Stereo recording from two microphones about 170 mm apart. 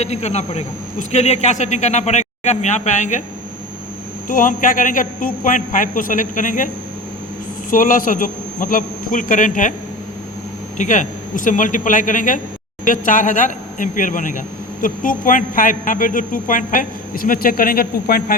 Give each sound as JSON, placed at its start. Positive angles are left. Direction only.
{"t": 0.0, "sound": "speech", "side_deg": 40}
{"t": 4.3, "sound": "speech", "side_deg": 55}
{"t": 7.7, "sound": "speech", "side_deg": 50}
{"t": 10.8, "sound": "speech", "side_deg": 50}